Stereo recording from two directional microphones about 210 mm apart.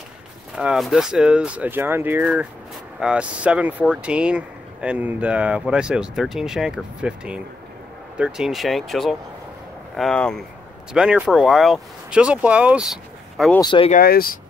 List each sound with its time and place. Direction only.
0.6 s speech: centre (ahead or behind)
13.6 s speech: 25° left (ahead or behind)
13.9 s speech: 45° left (ahead or behind)